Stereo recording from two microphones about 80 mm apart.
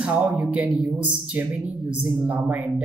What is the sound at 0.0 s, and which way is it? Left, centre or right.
Speech, centre.